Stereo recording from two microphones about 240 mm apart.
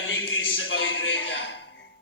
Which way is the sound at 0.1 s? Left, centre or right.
Left.